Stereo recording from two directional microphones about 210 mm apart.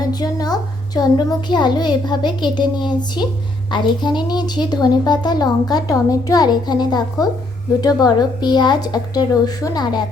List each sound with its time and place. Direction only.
0.1 s a woman's voice: 20° left (ahead or behind)